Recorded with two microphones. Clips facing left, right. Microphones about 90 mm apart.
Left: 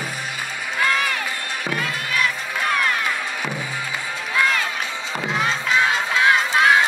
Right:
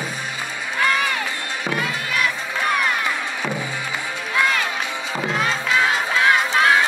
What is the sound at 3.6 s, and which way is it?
Music, 20° right (ahead or behind).